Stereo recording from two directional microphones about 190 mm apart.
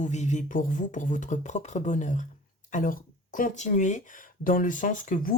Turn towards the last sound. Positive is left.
turn(degrees=45)  # may be behind; listen again after turning